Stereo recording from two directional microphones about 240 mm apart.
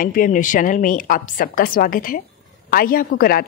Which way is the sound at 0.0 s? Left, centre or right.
Left.